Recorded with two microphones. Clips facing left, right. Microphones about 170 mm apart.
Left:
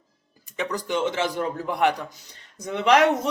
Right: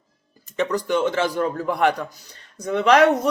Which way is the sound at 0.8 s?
20° left (ahead or behind).